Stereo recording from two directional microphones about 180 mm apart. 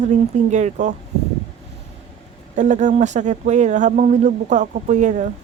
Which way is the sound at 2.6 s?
45° right (ahead or behind).